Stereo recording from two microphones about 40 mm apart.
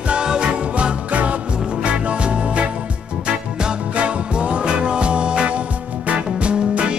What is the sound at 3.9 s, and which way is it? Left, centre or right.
Music, right.